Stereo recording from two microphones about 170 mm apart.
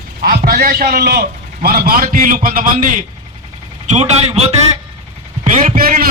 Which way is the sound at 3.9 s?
40° right (ahead or behind).